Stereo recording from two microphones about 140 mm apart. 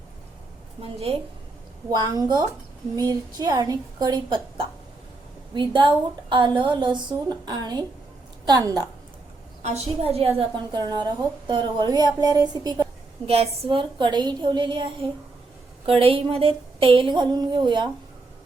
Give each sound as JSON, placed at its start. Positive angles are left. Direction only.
{"t": 0.8, "sound": "a woman's voice", "side_deg": -45}
{"t": 1.9, "sound": "a woman's voice", "side_deg": -30}
{"t": 9.6, "sound": "a woman's voice", "side_deg": -45}
{"t": 10.7, "sound": "a woman's voice", "side_deg": -30}
{"t": 13.2, "sound": "a woman's voice", "side_deg": -45}
{"t": 16.0, "sound": "a woman's voice", "side_deg": -40}